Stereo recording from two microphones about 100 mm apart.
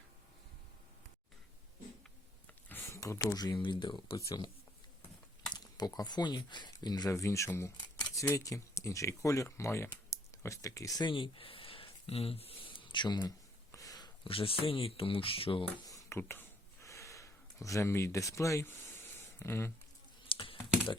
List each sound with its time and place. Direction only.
2.6 s a sound: 25° left (ahead or behind)
3.3 s speech: 45° left (ahead or behind)
5.5 s speech: 40° left (ahead or behind)
7.1 s speech: 30° left (ahead or behind)
11.0 s speech: 60° left (ahead or behind)
13.7 s a sound: 35° left (ahead or behind)
14.3 s speech: 70° left (ahead or behind)
15.9 s a sound: 25° left (ahead or behind)
20.2 s computer keyboard: 60° left (ahead or behind)